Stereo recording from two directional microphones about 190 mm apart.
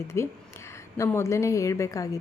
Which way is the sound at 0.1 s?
15° left (ahead or behind).